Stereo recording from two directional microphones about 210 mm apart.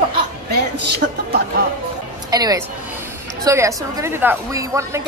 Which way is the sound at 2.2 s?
20° right (ahead or behind).